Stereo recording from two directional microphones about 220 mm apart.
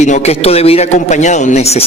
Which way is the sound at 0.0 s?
30° left (ahead or behind).